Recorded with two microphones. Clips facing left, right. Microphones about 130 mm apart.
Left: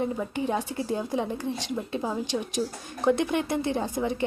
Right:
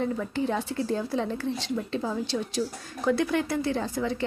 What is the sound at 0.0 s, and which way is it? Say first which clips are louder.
Speech: even; 15° left (ahead or behind).